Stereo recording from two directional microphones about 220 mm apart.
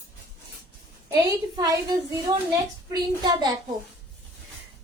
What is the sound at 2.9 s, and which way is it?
Speech, 20° right (ahead or behind).